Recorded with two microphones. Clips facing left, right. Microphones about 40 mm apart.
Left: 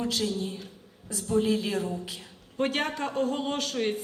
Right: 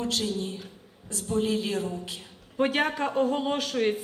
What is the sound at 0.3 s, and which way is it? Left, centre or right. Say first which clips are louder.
A woman's voice: right 1 dB; right.